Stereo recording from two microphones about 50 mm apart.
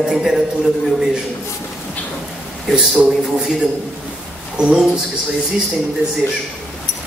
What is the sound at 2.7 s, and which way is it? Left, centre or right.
Speech, centre.